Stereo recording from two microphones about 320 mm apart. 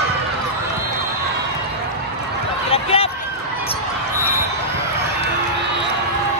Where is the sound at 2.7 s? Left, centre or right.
Centre.